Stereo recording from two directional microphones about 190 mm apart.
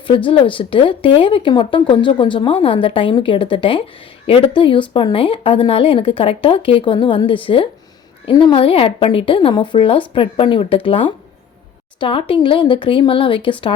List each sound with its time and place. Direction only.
0.3 s speech: 25° left (ahead or behind)